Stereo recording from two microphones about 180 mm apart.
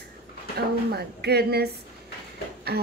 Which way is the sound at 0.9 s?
60° right (ahead or behind).